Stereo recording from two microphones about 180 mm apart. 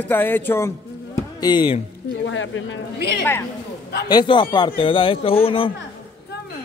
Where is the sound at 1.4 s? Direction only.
25° left (ahead or behind).